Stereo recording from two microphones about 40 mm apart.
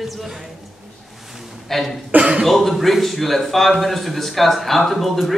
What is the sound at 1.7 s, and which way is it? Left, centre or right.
Speech, centre.